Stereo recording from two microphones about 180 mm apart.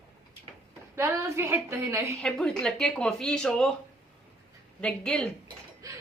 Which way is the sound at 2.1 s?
5° left (ahead or behind).